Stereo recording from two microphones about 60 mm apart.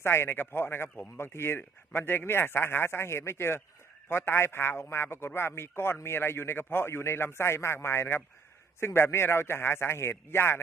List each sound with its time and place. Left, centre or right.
0.0 s a man's voice: left